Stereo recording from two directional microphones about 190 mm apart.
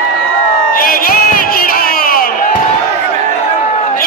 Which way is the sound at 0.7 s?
50° left (ahead or behind).